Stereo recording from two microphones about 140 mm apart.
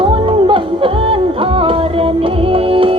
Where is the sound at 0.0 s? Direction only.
40° right (ahead or behind).